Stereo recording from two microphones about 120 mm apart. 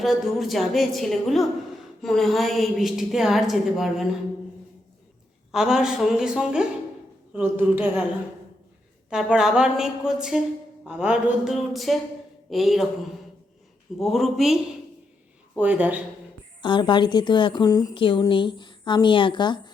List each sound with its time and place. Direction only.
0.0 s a woman's voice: centre (ahead or behind)
5.5 s a woman's voice: 5° right (ahead or behind)
9.0 s a woman's voice: 5° right (ahead or behind)
11.5 s a woman's voice: centre (ahead or behind)
14.0 s a woman's voice: centre (ahead or behind)
15.5 s speech: 10° right (ahead or behind)
16.6 s speech: 40° left (ahead or behind)
17.9 s speech: 45° left (ahead or behind)